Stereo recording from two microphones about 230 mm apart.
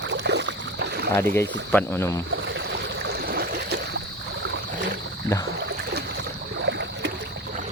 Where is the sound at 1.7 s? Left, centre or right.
Centre.